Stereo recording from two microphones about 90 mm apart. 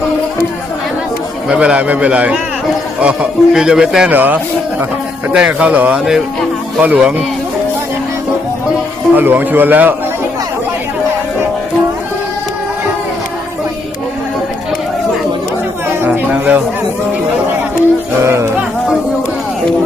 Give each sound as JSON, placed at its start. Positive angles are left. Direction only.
{"t": 1.5, "sound": "speech", "side_deg": -10}
{"t": 4.1, "sound": "a man's voice", "side_deg": -20}
{"t": 9.1, "sound": "a man's voice", "side_deg": -20}
{"t": 16.0, "sound": "music", "side_deg": -15}
{"t": 18.2, "sound": "music", "side_deg": -30}